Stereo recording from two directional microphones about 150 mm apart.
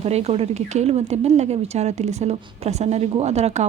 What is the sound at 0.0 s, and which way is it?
Speech, 45° right (ahead or behind).